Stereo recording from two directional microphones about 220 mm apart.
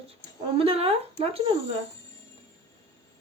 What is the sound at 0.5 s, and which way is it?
Speech, 25° right (ahead or behind).